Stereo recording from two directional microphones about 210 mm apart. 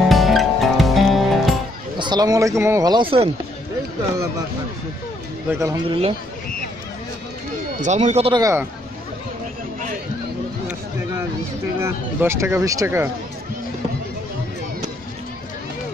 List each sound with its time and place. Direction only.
0.1 s music: centre (ahead or behind)
2.0 s a man's voice: 20° right (ahead or behind)
5.5 s a man's voice: 15° right (ahead or behind)
5.9 s speech: 25° right (ahead or behind)
7.8 s speech: 30° right (ahead or behind)
8.4 s a man's voice: 15° right (ahead or behind)
11.8 s a man's voice: 10° right (ahead or behind)